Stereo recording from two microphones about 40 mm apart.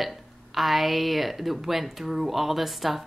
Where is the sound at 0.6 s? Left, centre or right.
Centre.